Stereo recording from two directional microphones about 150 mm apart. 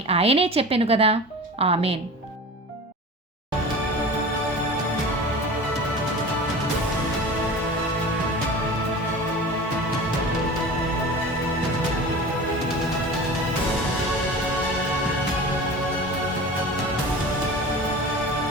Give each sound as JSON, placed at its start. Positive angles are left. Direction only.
{"t": 0.1, "sound": "a woman's voice", "side_deg": -40}